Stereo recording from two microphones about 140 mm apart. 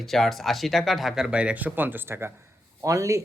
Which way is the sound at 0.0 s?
Centre (ahead or behind).